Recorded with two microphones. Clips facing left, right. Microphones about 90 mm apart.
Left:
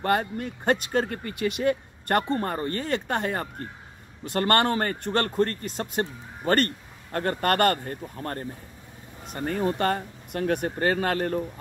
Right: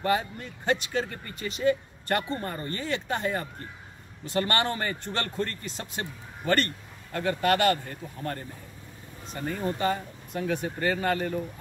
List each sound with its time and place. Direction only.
0.0 s a man's voice: 50° left (ahead or behind)